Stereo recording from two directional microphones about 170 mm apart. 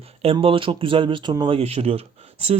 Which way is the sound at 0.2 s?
35° right (ahead or behind).